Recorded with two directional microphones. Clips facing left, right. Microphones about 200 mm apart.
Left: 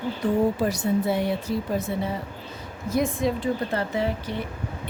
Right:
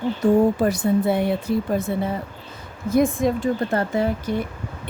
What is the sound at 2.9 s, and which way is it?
A woman's voice, 50° right (ahead or behind).